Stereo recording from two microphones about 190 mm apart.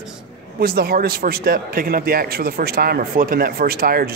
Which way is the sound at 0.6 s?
55° right (ahead or behind).